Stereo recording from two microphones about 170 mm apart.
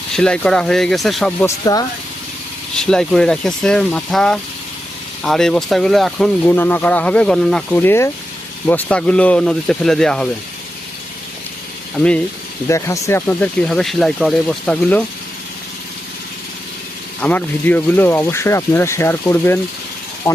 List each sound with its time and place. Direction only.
0.1 s speech: 5° left (ahead or behind)
1.5 s speech: 20° left (ahead or behind)
2.7 s speech: 5° left (ahead or behind)
6.4 s speech: 10° left (ahead or behind)
11.9 s speech: 5° left (ahead or behind)
12.6 s speech: 15° left (ahead or behind)
17.2 s speech: 10° left (ahead or behind)